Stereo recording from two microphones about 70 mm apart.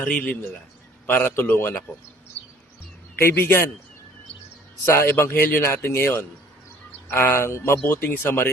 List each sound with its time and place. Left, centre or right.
0.0 s a man's voice: centre
1.0 s a man's voice: left
3.2 s a man's voice: left
4.9 s a man's voice: left